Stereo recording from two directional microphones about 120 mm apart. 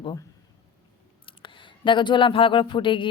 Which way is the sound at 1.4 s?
40° left (ahead or behind).